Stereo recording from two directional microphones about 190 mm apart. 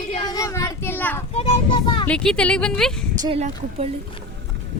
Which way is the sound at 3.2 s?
30° right (ahead or behind).